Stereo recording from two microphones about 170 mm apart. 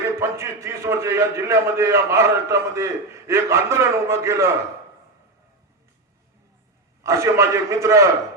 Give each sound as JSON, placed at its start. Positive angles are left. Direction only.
{"t": 0.2, "sound": "a man's voice", "side_deg": -15}
{"t": 7.0, "sound": "a man's voice", "side_deg": -15}